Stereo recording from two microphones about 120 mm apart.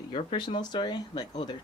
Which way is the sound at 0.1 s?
45° left (ahead or behind).